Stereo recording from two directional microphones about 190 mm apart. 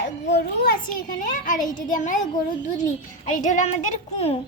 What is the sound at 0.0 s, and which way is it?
A child's voice, 65° left (ahead or behind).